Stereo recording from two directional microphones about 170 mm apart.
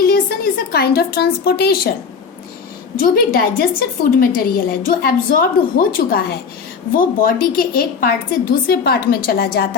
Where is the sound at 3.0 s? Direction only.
60° left (ahead or behind).